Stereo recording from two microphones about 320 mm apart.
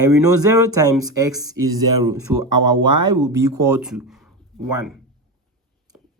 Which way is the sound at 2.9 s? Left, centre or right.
Right.